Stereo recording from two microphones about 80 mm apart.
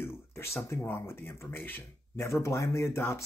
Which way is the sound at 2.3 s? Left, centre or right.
Left.